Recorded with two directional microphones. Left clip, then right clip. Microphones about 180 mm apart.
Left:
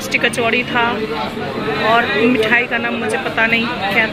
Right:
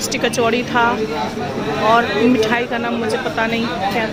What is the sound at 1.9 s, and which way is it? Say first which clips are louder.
Speech: left 1 dB; 15° right (ahead or behind).